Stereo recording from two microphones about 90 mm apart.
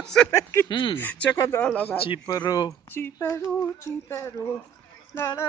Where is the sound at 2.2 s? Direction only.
45° left (ahead or behind).